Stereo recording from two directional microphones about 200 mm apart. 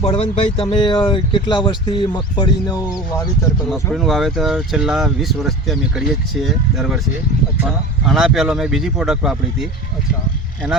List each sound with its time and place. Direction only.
0.0 s speech: 30° left (ahead or behind)
3.9 s speech: centre (ahead or behind)